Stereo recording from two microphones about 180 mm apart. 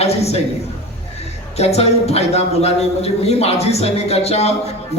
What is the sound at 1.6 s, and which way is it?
A man's voice, 35° left (ahead or behind).